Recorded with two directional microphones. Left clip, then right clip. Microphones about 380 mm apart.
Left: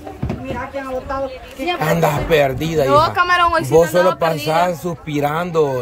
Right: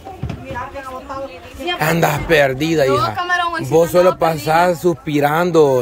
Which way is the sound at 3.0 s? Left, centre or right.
Centre.